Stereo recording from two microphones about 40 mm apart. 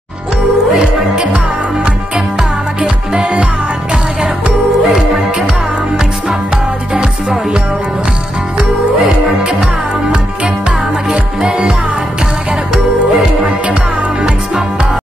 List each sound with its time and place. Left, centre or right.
1.1 s music: centre
2.8 s music: right
4.8 s music: centre
6.9 s music: centre
9.4 s music: right
11.4 s music: centre
12.7 s music: centre